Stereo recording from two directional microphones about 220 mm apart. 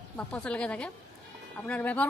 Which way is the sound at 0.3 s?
5° left (ahead or behind).